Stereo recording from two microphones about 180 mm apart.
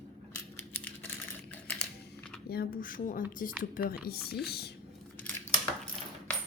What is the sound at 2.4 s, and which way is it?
Speech, 60° left (ahead or behind).